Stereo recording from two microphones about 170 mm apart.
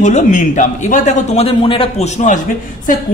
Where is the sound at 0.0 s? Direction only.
45° left (ahead or behind).